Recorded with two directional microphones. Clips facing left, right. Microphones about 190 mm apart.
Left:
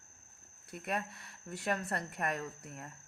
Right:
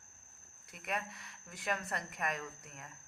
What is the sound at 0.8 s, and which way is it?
A woman's voice, 30° left (ahead or behind).